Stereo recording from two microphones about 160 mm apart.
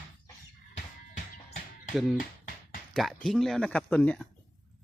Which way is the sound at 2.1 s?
65° left (ahead or behind).